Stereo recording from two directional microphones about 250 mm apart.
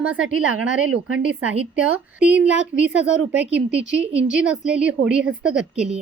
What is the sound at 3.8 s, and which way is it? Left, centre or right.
Speech, right.